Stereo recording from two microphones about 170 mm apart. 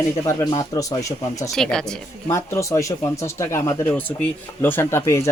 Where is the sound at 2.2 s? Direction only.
15° left (ahead or behind).